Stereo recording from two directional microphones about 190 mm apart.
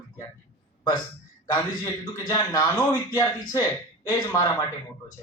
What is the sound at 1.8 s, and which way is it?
Speech, 15° left (ahead or behind).